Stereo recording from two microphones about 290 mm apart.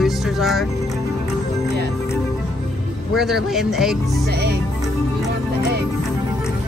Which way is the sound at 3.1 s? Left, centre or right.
Centre.